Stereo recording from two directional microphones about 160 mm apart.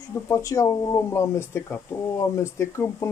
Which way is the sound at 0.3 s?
20° left (ahead or behind).